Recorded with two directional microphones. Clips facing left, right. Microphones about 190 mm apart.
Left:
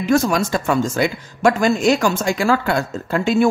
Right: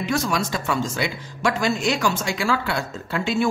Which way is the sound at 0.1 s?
50° left (ahead or behind).